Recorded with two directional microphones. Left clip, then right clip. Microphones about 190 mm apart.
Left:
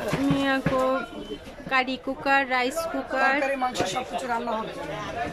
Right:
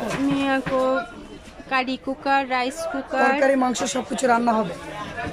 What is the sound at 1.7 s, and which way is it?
A woman's voice, centre (ahead or behind).